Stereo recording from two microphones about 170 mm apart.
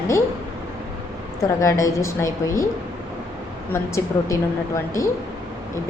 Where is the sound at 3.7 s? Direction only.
15° left (ahead or behind).